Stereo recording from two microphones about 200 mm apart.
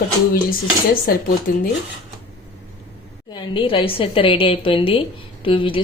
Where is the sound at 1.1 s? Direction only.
45° left (ahead or behind).